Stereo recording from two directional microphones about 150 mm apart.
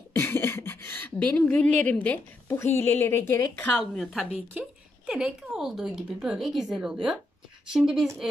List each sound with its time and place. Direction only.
0.1 s speech: 15° left (ahead or behind)
4.0 s a woman's voice: centre (ahead or behind)